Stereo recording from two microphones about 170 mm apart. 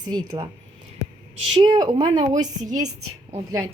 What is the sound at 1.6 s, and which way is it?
Speech, 25° right (ahead or behind).